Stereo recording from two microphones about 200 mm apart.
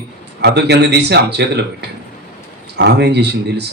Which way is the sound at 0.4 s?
55° right (ahead or behind).